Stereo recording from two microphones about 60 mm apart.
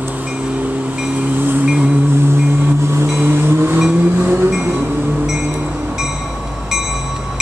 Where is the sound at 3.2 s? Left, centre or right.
Right.